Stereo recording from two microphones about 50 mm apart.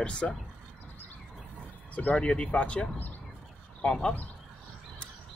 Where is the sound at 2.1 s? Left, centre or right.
Centre.